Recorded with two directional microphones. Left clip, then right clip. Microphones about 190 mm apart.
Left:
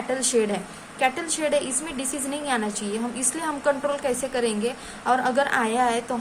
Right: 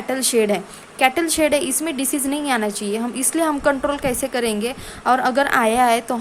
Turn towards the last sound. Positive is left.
turn(degrees=-40)  # may be behind; listen again after turning